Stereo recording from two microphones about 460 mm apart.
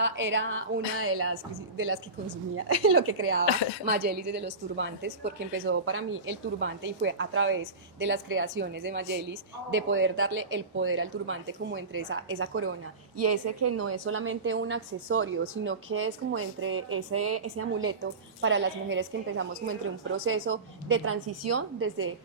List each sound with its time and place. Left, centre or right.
0.0 s a woman's voice: right